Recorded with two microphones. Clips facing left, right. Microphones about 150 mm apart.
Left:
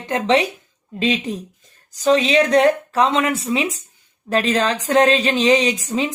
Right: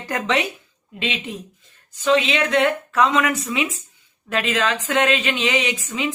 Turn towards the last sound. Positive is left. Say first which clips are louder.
# left 4 dB
turn(degrees=40)  # may be behind; listen again after turning